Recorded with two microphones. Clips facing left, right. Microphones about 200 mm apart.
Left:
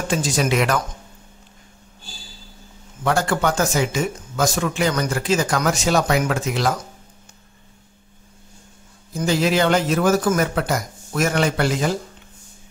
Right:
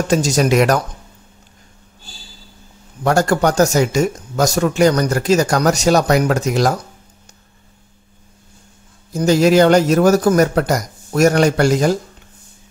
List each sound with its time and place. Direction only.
0.1 s speech: 40° right (ahead or behind)
3.0 s speech: 40° right (ahead or behind)
9.1 s speech: 40° right (ahead or behind)